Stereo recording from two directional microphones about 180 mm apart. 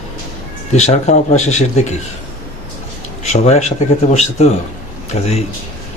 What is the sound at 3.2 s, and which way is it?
A man's voice, 40° left (ahead or behind).